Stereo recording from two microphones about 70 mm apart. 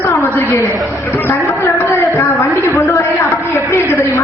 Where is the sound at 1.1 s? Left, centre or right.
Left.